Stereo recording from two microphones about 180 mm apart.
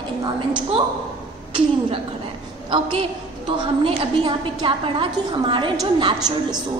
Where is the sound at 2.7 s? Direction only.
30° right (ahead or behind).